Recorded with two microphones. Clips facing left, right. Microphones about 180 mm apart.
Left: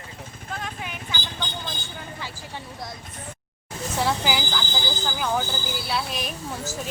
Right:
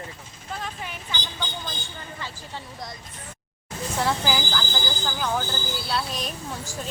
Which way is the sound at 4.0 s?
5° left (ahead or behind).